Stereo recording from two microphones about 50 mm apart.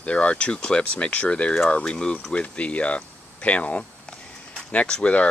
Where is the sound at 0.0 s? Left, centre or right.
Left.